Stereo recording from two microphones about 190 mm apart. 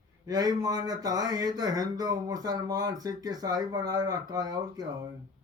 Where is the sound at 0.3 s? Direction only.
20° right (ahead or behind).